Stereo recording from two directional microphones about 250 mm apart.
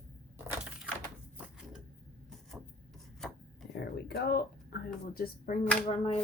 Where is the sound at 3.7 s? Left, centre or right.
Left.